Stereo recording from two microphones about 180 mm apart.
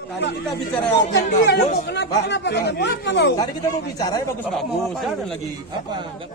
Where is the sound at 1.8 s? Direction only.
75° left (ahead or behind).